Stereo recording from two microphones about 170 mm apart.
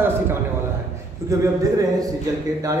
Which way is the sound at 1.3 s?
20° right (ahead or behind).